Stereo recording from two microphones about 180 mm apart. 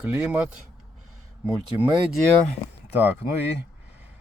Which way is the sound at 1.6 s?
25° right (ahead or behind).